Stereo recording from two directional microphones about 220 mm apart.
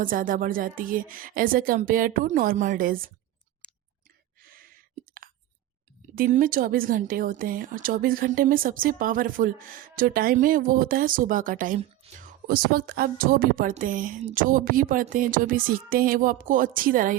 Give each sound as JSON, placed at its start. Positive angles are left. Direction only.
{"t": 0.0, "sound": "speech", "side_deg": -40}
{"t": 6.1, "sound": "speech", "side_deg": -35}